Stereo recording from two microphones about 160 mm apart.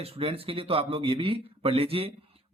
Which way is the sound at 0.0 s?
35° right (ahead or behind).